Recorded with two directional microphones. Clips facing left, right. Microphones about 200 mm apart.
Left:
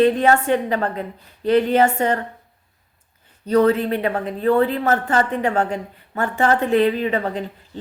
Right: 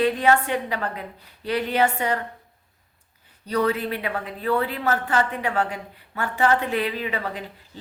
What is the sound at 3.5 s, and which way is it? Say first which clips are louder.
A woman's voice: left 7 dB; 45° left (ahead or behind).